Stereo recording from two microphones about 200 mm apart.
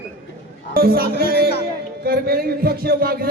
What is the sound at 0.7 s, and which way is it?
Speech, 50° right (ahead or behind).